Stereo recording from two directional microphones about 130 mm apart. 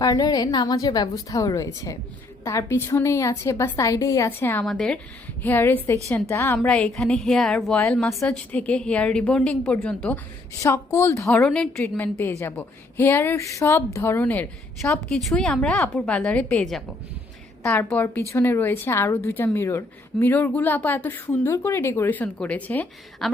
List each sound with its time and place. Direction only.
0.0 s a woman's voice: 30° left (ahead or behind)
4.6 s a woman's voice: 5° left (ahead or behind)
5.4 s a woman's voice: 15° left (ahead or behind)
6.7 s a woman's voice: 5° left (ahead or behind)
11.3 s a woman's voice: 5° left (ahead or behind)
23.2 s a woman's voice: centre (ahead or behind)